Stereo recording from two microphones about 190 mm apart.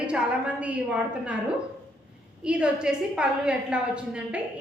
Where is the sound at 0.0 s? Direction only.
5° right (ahead or behind).